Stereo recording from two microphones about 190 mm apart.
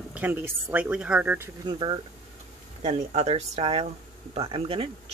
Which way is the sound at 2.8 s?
35° right (ahead or behind).